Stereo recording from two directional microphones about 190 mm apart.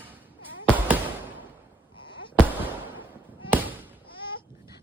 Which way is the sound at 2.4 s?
10° right (ahead or behind).